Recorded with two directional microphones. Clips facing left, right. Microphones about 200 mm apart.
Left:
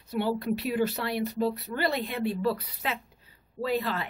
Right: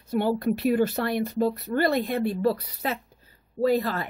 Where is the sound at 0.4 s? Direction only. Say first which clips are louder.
Right 5 dB; 50° right (ahead or behind).